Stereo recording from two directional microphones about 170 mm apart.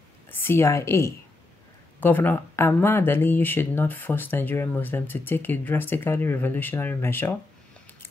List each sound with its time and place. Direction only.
0.3 s speech: 15° left (ahead or behind)